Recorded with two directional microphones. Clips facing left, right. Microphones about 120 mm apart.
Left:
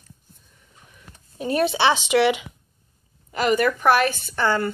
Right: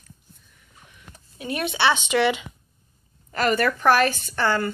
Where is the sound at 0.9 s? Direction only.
35° left (ahead or behind).